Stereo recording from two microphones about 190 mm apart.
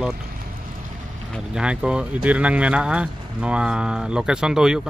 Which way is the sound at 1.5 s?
5° right (ahead or behind).